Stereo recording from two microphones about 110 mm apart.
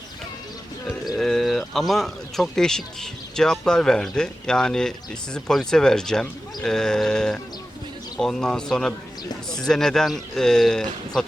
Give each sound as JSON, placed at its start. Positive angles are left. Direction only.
{"t": 1.2, "sound": "a sound", "side_deg": 0}
{"t": 1.9, "sound": "speech", "side_deg": 0}
{"t": 9.3, "sound": "speech", "side_deg": 40}
{"t": 9.6, "sound": "speech", "side_deg": 5}